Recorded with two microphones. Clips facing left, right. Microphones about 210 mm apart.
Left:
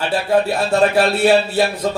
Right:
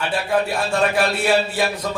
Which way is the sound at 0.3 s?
40° left (ahead or behind).